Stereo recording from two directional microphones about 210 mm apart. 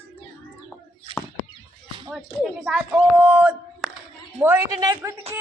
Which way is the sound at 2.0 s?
Centre (ahead or behind).